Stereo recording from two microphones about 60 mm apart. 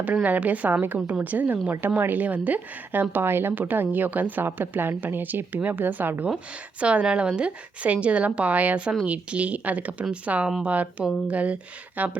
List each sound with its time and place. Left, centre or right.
0.0 s a woman's voice: right
6.7 s a woman's voice: centre